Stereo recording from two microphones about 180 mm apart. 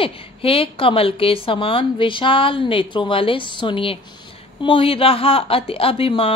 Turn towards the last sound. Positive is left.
turn(degrees=30)  # may be behind; listen again after turning